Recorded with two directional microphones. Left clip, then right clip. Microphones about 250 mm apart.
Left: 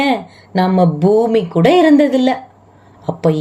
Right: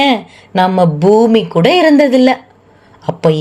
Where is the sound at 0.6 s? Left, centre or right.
Right.